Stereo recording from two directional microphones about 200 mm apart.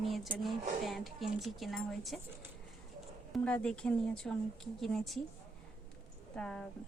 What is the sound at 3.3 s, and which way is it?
Speech, 5° left (ahead or behind).